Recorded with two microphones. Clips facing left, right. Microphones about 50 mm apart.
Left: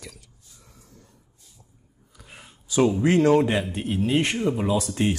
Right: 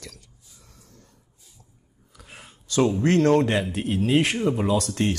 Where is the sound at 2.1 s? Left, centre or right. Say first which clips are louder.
Right 1 dB; centre.